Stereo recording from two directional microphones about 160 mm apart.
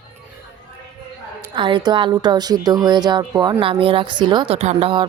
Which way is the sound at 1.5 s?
35° right (ahead or behind).